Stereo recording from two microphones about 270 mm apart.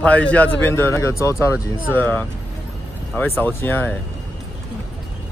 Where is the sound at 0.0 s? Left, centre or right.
Centre.